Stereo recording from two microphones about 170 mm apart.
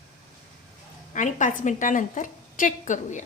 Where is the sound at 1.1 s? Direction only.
50° left (ahead or behind).